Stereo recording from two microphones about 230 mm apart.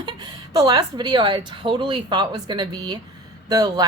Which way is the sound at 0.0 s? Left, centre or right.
Centre.